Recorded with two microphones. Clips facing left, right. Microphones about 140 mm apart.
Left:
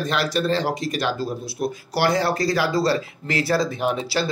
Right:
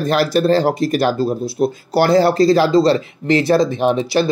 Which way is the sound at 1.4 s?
25° right (ahead or behind).